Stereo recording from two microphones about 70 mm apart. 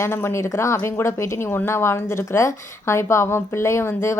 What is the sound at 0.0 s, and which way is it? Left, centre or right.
Speech, left.